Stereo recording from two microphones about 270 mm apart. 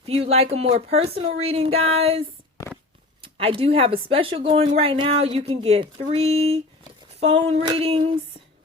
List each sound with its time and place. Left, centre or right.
0.0 s speech: right